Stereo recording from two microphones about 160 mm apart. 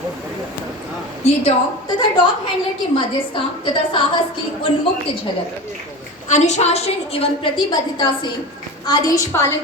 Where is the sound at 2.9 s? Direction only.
30° left (ahead or behind).